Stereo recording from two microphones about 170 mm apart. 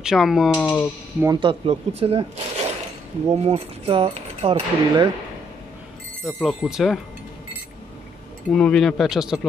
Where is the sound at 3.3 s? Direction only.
35° right (ahead or behind).